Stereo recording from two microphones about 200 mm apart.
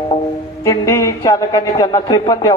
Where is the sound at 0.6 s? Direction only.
15° left (ahead or behind).